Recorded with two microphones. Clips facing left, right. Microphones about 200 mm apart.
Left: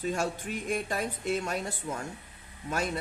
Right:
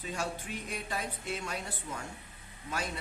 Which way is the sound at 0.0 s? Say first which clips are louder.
Left 6 dB; 45° left (ahead or behind).